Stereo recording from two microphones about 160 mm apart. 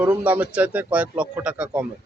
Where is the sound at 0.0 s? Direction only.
10° right (ahead or behind).